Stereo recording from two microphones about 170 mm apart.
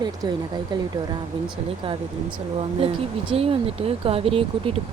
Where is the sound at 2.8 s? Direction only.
35° right (ahead or behind).